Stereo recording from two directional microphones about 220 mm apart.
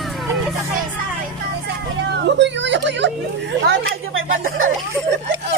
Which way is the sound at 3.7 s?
60° right (ahead or behind).